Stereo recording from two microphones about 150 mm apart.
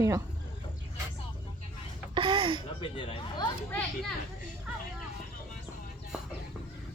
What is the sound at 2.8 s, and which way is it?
Speech, 35° left (ahead or behind).